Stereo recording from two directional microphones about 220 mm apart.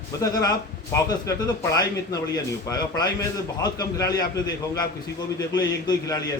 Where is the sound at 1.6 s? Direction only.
15° left (ahead or behind).